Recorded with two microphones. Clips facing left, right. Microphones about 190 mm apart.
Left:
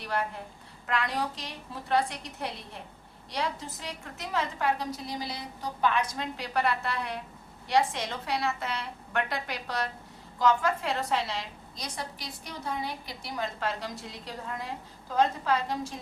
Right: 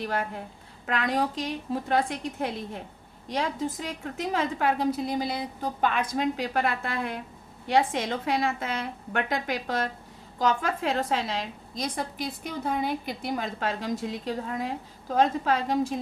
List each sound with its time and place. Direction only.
0.9 s a woman's voice: 45° right (ahead or behind)